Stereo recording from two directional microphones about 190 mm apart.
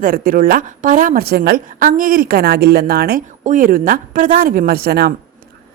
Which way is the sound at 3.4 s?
40° right (ahead or behind).